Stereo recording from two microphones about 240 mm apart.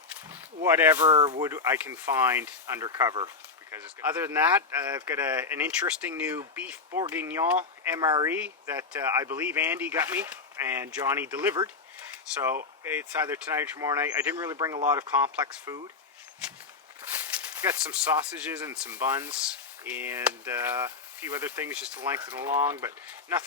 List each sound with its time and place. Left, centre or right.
0.3 s speech: centre
1.1 s speech: right
1.4 s speech: centre
11.6 s a sound: centre
12.8 s speech: centre
17.0 s speech: centre